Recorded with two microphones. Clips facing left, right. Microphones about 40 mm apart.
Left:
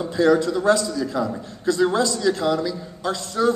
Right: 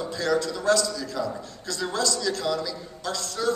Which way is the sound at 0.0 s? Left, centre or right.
Left.